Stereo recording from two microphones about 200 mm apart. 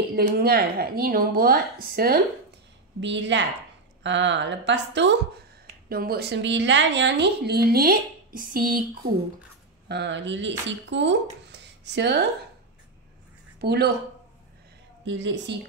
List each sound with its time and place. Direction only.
0.1 s a woman's voice: 50° right (ahead or behind)
3.0 s a woman's voice: 65° right (ahead or behind)
5.9 s a woman's voice: 50° right (ahead or behind)
9.8 s speech: 60° right (ahead or behind)
13.6 s speech: 55° right (ahead or behind)
15.0 s a woman's voice: 60° right (ahead or behind)